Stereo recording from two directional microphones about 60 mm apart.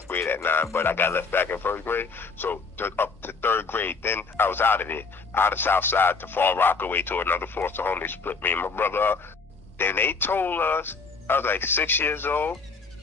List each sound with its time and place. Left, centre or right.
0.1 s music: left
0.4 s a man's voice: left